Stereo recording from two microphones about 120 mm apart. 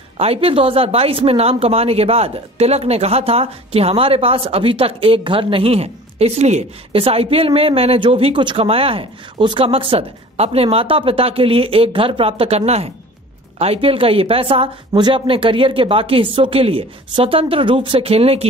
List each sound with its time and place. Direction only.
0.2 s speech: 50° right (ahead or behind)
7.0 s speech: 55° right (ahead or behind)